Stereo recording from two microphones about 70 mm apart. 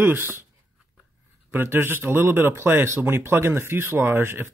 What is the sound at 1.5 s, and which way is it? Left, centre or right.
Speech, right.